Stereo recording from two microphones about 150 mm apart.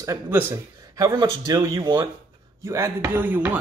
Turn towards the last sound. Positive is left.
turn(degrees=-10)  # may be behind; listen again after turning